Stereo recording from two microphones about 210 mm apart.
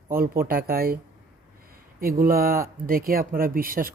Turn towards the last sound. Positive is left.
turn(degrees=-45)  # may be behind; listen again after turning